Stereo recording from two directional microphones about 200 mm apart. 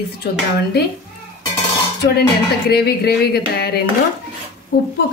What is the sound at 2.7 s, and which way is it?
A woman's voice, 50° left (ahead or behind).